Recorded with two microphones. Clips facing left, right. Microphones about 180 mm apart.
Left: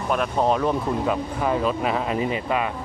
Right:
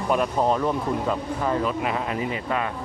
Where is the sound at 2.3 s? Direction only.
15° left (ahead or behind).